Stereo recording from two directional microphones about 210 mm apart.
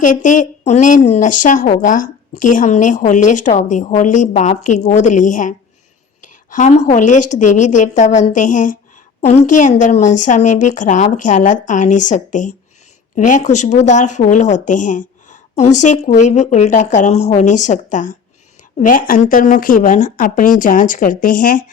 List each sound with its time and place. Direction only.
0.0 s a woman's voice: 40° left (ahead or behind)